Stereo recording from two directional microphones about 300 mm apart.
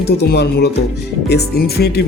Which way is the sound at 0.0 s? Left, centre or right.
Left.